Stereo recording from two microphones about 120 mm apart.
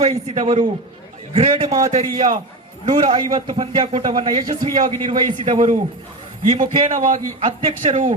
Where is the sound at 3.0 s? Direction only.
45° right (ahead or behind).